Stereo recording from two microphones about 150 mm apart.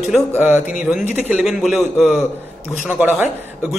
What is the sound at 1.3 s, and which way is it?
A man's voice, 5° right (ahead or behind).